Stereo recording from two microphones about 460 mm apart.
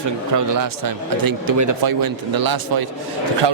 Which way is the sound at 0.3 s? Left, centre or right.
Right.